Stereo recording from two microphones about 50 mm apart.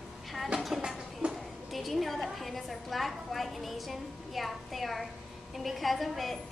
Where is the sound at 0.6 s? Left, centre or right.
Centre.